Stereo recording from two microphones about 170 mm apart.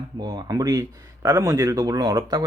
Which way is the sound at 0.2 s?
25° right (ahead or behind).